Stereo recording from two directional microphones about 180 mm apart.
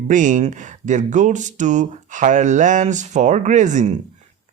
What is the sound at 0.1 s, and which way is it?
Speech, 45° right (ahead or behind).